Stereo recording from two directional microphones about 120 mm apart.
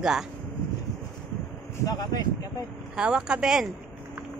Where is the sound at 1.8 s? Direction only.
30° left (ahead or behind).